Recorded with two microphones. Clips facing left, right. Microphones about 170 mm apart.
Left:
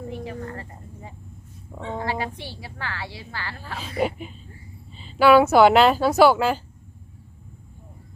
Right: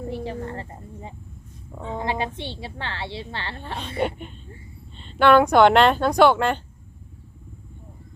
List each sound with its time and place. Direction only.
0.3 s a woman's voice: 25° right (ahead or behind)
1.7 s a woman's voice: centre (ahead or behind)
2.0 s a woman's voice: 20° right (ahead or behind)
4.0 s a woman's voice: 5° left (ahead or behind)